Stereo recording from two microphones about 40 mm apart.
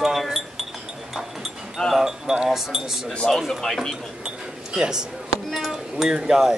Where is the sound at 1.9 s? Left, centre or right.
Centre.